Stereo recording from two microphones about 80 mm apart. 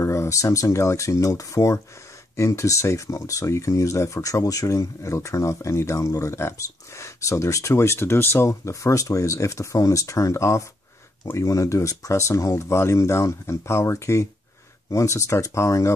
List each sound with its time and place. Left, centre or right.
0.0 s speech: left